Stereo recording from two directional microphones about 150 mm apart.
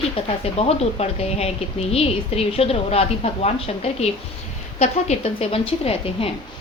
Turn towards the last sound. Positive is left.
turn(degrees=40)  # may be behind; listen again after turning